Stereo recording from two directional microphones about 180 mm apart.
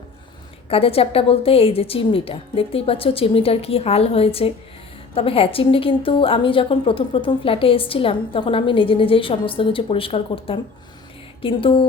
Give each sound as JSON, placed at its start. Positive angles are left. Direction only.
{"t": 0.7, "sound": "a woman's voice", "side_deg": 30}